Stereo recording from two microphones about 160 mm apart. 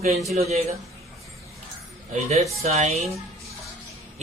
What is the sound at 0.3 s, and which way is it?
Speech, 40° right (ahead or behind).